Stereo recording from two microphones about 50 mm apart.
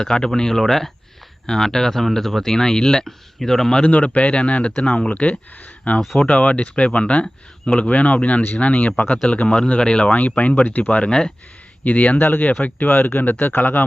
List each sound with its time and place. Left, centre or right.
0.0 s speech: centre
3.8 s speech: left
10.2 s speech: left
12.1 s speech: left